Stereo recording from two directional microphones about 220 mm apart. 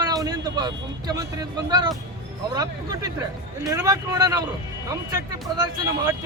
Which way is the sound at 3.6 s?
15° right (ahead or behind).